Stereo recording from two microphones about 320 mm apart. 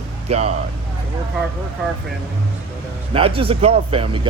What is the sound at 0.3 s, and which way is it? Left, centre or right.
Speech, centre.